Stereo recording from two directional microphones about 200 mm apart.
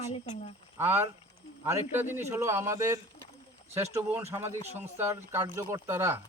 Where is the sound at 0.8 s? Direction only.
10° right (ahead or behind).